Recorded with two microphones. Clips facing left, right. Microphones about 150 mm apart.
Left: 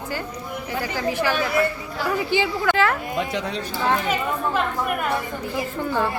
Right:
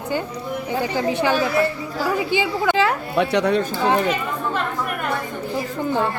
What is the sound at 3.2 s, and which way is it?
Speech, 70° right (ahead or behind).